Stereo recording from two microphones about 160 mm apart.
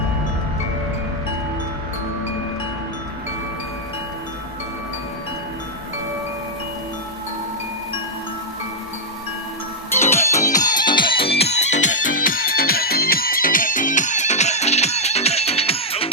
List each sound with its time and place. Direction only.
10.0 s music: 15° left (ahead or behind)
10.3 s music: 50° left (ahead or behind)
10.8 s music: 30° left (ahead or behind)
11.3 s music: 45° left (ahead or behind)